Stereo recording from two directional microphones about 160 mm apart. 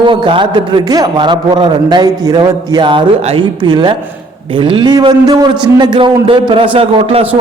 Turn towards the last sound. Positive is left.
turn(degrees=-35)  # may be behind; listen again after turning